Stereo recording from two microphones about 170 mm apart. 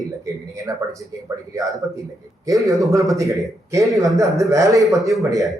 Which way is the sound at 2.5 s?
20° right (ahead or behind).